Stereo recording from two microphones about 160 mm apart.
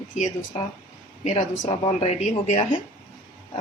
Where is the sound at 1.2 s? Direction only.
45° left (ahead or behind).